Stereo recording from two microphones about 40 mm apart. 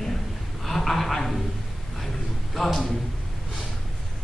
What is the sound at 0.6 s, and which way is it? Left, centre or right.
Speech, centre.